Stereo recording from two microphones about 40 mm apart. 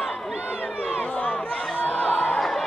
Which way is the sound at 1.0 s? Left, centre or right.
Left.